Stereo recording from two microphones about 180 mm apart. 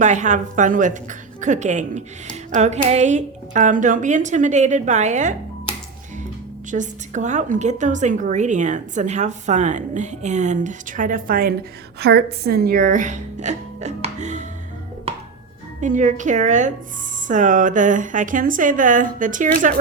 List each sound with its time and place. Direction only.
0.0 s a woman's voice: 40° right (ahead or behind)
6.7 s a woman's voice: 45° right (ahead or behind)
11.9 s speech: 65° right (ahead or behind); by 14.4 s 40° right (ahead or behind)
15.8 s a woman's voice: 45° right (ahead or behind)